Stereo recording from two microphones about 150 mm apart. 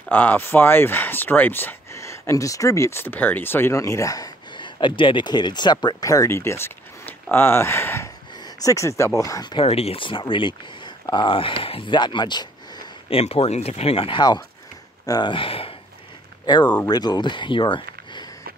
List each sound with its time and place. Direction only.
0.1 s speech: 10° left (ahead or behind)
8.3 s speech: 25° left (ahead or behind)
9.7 s speech: 40° left (ahead or behind)
13.2 s speech: 45° left (ahead or behind)